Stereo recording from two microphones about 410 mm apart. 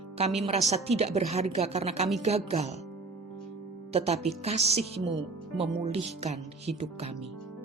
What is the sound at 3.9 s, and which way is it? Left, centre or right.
A woman's voice, centre.